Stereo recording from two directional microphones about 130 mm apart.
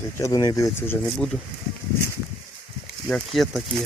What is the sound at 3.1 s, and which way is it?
Speech, centre (ahead or behind).